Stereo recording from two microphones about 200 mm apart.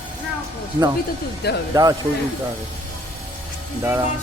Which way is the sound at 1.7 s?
20° right (ahead or behind).